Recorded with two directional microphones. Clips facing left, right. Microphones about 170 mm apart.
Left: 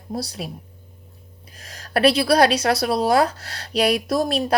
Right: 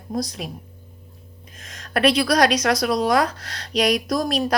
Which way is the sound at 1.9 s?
30° left (ahead or behind).